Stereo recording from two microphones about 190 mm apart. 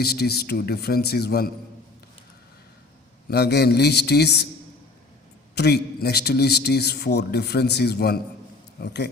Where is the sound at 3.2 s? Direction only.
60° left (ahead or behind).